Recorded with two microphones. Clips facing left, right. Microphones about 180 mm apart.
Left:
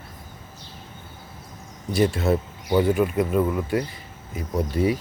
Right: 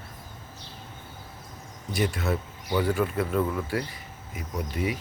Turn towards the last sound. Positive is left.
turn(degrees=35)  # may be behind; listen again after turning